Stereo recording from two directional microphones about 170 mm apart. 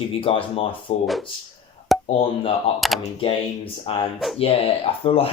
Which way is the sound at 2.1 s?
35° left (ahead or behind).